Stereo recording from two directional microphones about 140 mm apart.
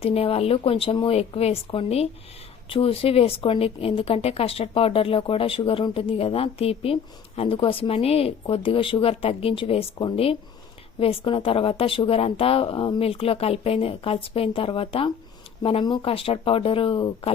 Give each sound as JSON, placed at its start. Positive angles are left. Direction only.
{"t": 0.0, "sound": "speech", "side_deg": 45}